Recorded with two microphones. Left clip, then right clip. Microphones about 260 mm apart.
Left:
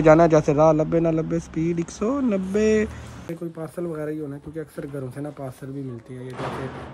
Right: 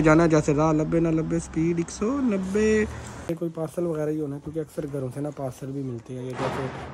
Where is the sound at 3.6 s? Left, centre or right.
Centre.